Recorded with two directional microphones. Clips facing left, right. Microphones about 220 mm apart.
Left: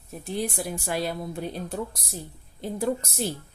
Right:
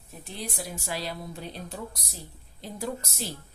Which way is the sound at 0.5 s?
55° left (ahead or behind).